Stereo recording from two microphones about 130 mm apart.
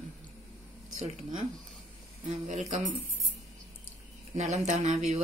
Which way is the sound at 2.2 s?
60° right (ahead or behind).